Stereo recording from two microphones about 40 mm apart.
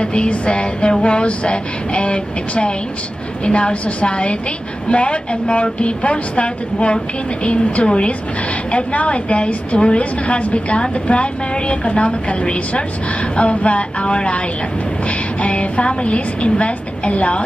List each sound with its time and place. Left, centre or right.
0.0 s a woman's voice: left